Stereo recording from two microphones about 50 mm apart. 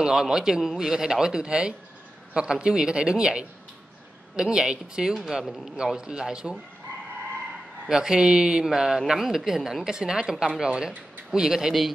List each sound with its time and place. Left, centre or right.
0.0 s speech: centre
7.9 s speech: centre